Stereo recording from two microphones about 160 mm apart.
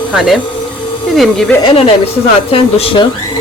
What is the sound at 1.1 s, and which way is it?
Speech, centre (ahead or behind).